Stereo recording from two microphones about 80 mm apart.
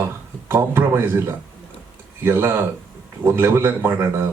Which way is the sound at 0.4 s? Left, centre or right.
Right.